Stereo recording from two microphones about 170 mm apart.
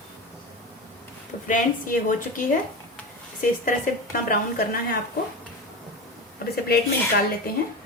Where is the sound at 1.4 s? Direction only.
50° left (ahead or behind).